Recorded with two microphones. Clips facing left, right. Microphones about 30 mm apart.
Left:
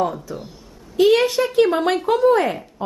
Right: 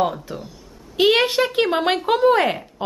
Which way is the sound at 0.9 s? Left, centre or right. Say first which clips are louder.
Left 1 dB; right.